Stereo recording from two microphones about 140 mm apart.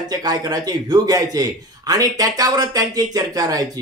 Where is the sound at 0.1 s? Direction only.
30° right (ahead or behind).